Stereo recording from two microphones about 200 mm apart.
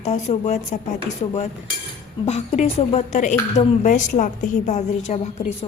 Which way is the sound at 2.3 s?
35° left (ahead or behind).